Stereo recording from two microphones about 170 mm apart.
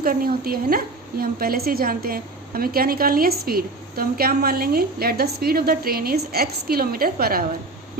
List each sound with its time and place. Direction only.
0.0 s a woman's voice: 60° right (ahead or behind)